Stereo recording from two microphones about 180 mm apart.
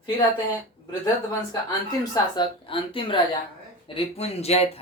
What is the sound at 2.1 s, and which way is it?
Speech, 25° left (ahead or behind).